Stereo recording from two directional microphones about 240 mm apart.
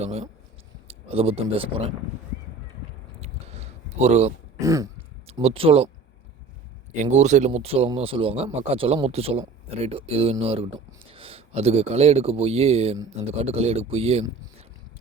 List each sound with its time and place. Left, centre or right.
0.0 s a man's voice: right
3.2 s a sound: right
4.6 s throat clearing: centre
5.2 s speech: right
6.9 s a man's voice: right